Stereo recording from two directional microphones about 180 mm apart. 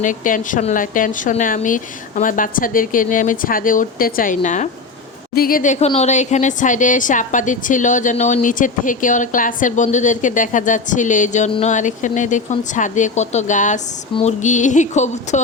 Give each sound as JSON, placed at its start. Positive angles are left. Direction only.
{"t": 0.0, "sound": "a woman's voice", "side_deg": 45}
{"t": 5.3, "sound": "a woman's voice", "side_deg": 55}
{"t": 14.2, "sound": "a sound", "side_deg": 40}